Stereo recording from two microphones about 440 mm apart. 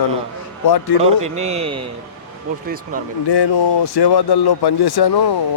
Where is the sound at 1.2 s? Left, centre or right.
Centre.